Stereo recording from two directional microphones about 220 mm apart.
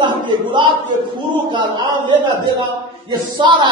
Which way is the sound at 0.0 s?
20° right (ahead or behind).